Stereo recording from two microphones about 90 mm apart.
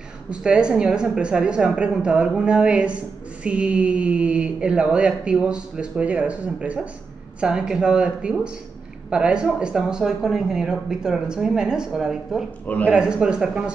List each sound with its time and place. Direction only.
0.3 s speech: 10° right (ahead or behind)
12.6 s speech: 15° left (ahead or behind)
12.9 s speech: 10° right (ahead or behind)